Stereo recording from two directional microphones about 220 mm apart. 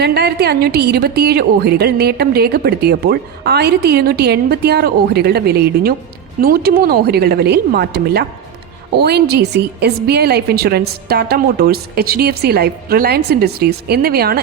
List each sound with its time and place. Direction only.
0.0 s a woman's voice: 50° right (ahead or behind)